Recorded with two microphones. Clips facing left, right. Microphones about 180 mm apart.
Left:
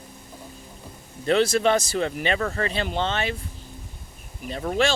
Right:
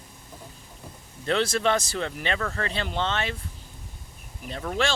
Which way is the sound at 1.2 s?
10° left (ahead or behind).